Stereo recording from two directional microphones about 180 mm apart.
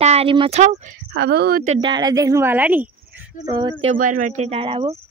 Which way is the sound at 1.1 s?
65° right (ahead or behind).